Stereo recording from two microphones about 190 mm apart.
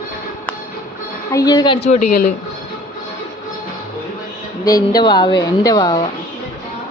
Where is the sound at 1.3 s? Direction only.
20° left (ahead or behind).